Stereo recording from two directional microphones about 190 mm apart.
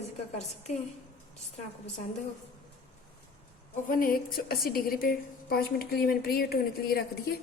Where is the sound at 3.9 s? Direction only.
50° left (ahead or behind).